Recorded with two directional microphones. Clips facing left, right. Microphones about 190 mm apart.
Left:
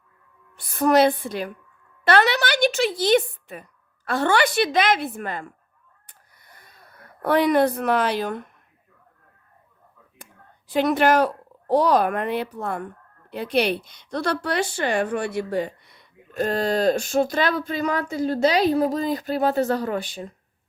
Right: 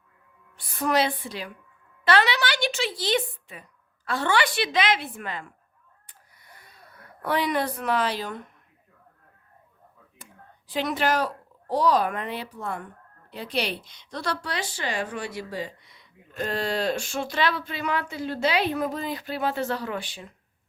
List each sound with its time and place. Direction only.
0.5 s a woman's voice: 45° left (ahead or behind)
6.1 s a sound: 45° left (ahead or behind)
7.2 s a woman's voice: 50° left (ahead or behind)
10.7 s a woman's voice: 55° left (ahead or behind)